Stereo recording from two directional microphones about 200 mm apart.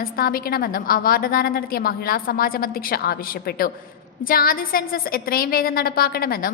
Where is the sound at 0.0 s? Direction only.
45° left (ahead or behind).